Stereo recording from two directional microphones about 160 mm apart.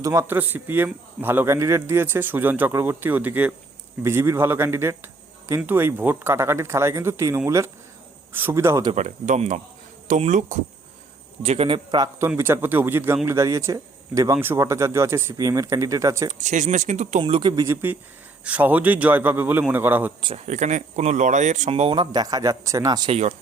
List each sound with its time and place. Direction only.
0.0 s speech: 20° right (ahead or behind)
8.9 s speech: 45° right (ahead or behind); by 12.0 s 30° right (ahead or behind)
12.4 s speech: 15° right (ahead or behind)
16.3 s speech: 50° right (ahead or behind)
17.2 s speech: 35° right (ahead or behind); by 20.1 s 10° right (ahead or behind)
20.2 s speech: 40° right (ahead or behind); by 23.1 s 25° right (ahead or behind)